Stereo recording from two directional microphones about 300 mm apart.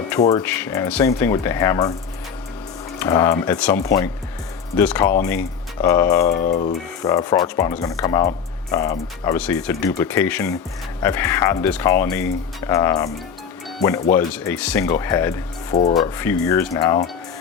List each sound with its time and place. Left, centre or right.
0.1 s speech: centre
3.0 s speech: centre
6.2 s speech: left
7.0 s speech: centre